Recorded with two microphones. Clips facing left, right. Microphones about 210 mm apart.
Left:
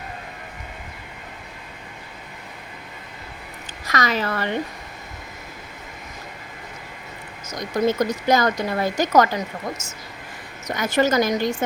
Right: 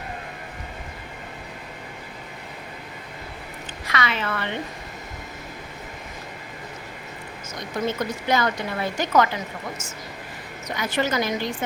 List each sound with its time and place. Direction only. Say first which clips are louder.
3.8 s speech: left 4 dB; 40° left (ahead or behind)
7.9 s speech: left 5 dB; 40° left (ahead or behind)
10.8 s a woman's voice: left 5 dB; 45° left (ahead or behind)